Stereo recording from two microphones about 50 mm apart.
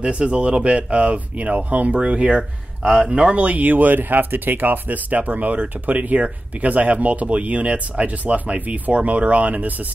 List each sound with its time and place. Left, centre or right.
0.0 s speech: right